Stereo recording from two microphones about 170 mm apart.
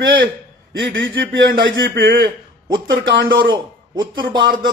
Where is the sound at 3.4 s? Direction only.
30° right (ahead or behind).